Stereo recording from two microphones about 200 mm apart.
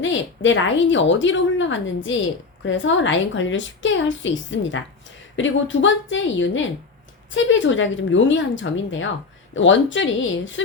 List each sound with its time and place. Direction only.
0.0 s a woman's voice: 70° left (ahead or behind)